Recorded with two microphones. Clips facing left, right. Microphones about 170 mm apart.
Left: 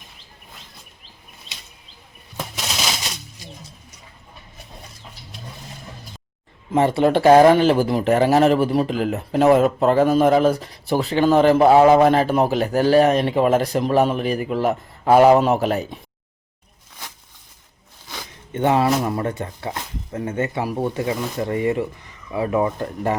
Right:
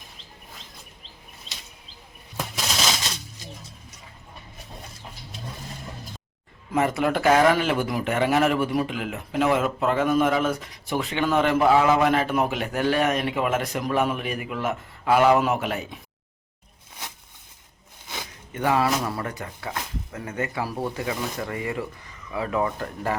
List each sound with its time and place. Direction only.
2.6 s a sound: 5° left (ahead or behind)
6.7 s speech: 30° left (ahead or behind)
18.5 s speech: 25° left (ahead or behind)